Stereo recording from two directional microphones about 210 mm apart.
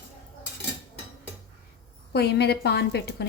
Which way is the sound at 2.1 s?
50° left (ahead or behind).